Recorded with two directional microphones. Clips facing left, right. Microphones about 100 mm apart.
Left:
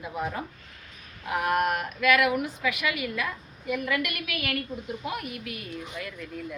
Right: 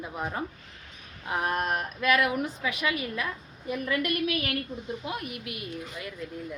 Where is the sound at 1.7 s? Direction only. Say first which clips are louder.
Left 2 dB; 35° right (ahead or behind).